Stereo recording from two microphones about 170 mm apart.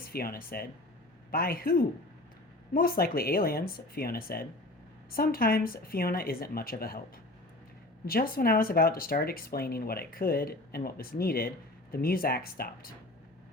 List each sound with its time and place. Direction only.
0.0 s speech: 60° left (ahead or behind)
8.0 s speech: 60° left (ahead or behind)